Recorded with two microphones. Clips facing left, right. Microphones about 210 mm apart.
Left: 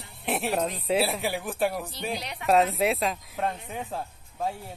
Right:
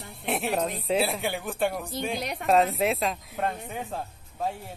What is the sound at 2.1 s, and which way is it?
Speech, 50° right (ahead or behind).